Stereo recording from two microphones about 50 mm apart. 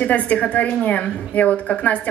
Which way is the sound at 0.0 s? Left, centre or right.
Left.